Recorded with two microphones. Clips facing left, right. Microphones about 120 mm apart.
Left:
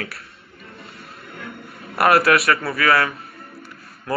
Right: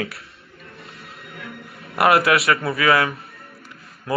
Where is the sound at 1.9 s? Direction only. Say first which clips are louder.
Left 1 dB; 20° right (ahead or behind).